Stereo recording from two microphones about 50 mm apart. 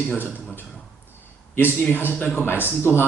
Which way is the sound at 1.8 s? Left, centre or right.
Left.